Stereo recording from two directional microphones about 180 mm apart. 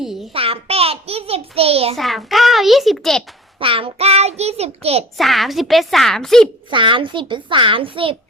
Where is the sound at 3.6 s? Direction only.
30° right (ahead or behind).